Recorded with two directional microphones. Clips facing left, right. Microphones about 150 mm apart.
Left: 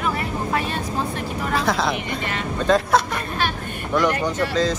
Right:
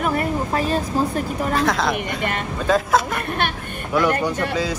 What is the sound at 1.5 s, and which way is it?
Speech, centre (ahead or behind).